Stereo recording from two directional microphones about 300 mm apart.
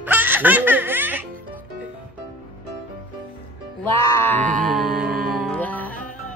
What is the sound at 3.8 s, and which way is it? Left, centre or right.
Music, centre.